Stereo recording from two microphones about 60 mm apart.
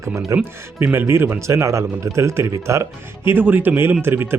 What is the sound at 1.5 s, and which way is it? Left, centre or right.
Speech, right.